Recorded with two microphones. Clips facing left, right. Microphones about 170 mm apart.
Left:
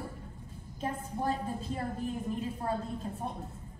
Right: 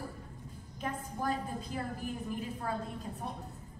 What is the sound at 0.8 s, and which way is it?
A woman's voice, 30° left (ahead or behind).